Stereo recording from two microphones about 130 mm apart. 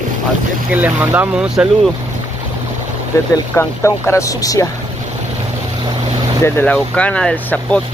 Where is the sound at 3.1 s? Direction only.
25° left (ahead or behind).